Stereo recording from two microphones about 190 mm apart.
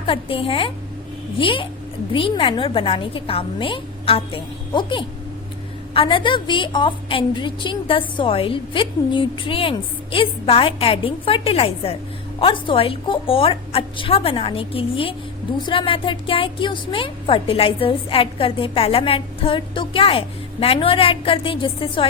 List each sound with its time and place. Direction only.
0.0 s speech: 30° left (ahead or behind)